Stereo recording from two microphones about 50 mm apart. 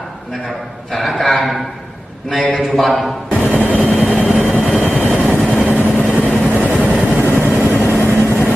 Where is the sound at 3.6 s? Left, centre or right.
Right.